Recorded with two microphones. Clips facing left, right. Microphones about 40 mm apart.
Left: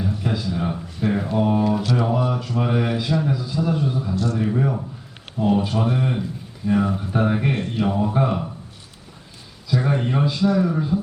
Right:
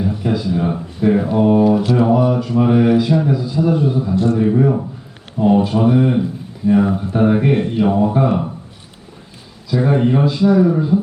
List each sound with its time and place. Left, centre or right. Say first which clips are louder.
0.0 s a sound: right 6 dB; centre
1.1 s speech: right 7 dB; centre
1.8 s mantra: right 7 dB; centre
3.2 s a sound: right 6 dB; centre
3.5 s speech: right 7 dB; centre
4.1 s mantra: right 8 dB; right
4.4 s speech: right 7 dB; centre
7.5 s speech: right 7 dB; centre
9.8 s speech: right 9 dB; centre